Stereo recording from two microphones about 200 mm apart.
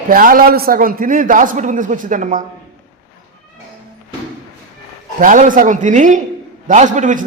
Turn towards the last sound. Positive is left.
turn(degrees=-40)  # may be behind; listen again after turning